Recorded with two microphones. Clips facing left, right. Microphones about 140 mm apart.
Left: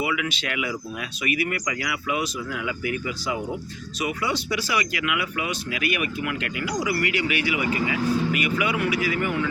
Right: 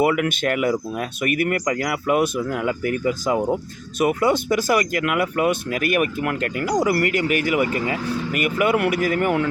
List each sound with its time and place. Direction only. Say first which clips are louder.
0.0 s speech: right 8 dB; 50° right (ahead or behind)